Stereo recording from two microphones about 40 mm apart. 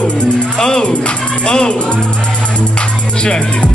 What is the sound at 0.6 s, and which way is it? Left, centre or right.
Music, centre.